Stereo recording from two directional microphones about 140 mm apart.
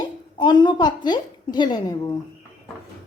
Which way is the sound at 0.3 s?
35° left (ahead or behind).